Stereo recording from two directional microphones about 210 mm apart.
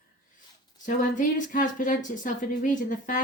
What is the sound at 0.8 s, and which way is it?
Speech, 40° left (ahead or behind).